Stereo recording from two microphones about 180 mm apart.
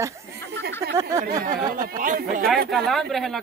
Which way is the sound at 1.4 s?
50° right (ahead or behind).